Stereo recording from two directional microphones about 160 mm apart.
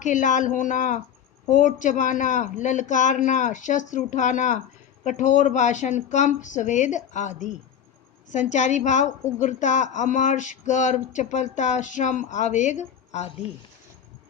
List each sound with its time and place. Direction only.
0.0 s a woman's voice: 50° left (ahead or behind)